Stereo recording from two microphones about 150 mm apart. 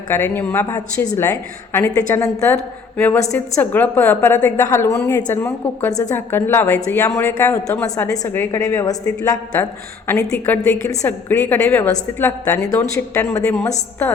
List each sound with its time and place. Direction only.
0.1 s a woman's voice: 15° left (ahead or behind)